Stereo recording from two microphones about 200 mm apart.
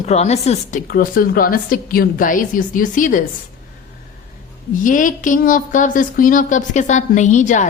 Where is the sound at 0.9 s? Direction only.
45° left (ahead or behind).